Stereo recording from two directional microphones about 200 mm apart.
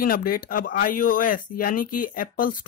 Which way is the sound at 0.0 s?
45° left (ahead or behind).